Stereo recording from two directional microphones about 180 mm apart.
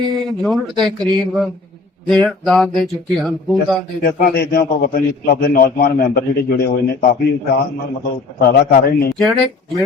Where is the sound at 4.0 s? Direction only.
55° left (ahead or behind).